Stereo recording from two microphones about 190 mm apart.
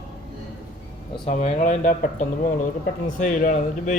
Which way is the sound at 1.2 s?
35° left (ahead or behind).